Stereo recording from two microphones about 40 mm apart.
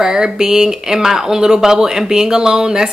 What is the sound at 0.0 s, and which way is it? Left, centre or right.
Speech, centre.